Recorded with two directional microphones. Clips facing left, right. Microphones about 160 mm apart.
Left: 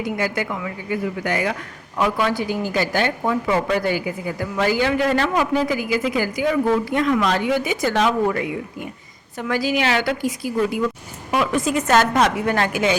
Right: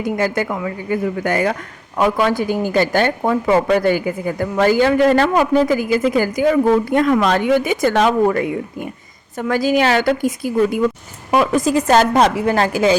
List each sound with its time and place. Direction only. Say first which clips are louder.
0.0 s a woman's voice: right 4 dB; 45° right (ahead or behind)
9.5 s a woman's voice: right 5 dB; 45° right (ahead or behind)
11.3 s a woman's voice: right 5 dB; 40° right (ahead or behind)